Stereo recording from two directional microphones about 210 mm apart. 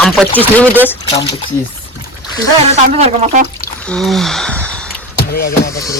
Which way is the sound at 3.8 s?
Centre (ahead or behind).